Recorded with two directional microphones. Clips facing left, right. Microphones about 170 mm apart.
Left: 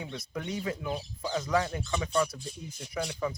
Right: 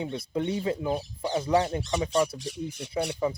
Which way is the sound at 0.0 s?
30° right (ahead or behind).